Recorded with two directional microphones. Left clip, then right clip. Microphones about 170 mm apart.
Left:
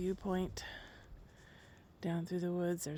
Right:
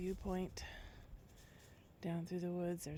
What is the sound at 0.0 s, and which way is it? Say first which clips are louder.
Speech: left 5 dB; 30° left (ahead or behind).